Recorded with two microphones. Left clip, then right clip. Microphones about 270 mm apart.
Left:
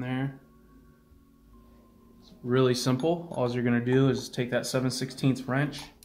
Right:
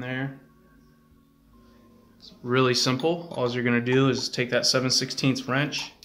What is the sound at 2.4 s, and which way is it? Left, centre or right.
Speech, centre.